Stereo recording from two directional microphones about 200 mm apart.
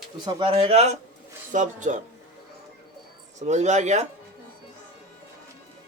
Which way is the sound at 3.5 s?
35° right (ahead or behind).